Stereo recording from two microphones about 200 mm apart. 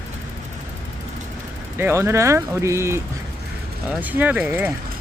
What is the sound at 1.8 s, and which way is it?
Speech, 10° right (ahead or behind).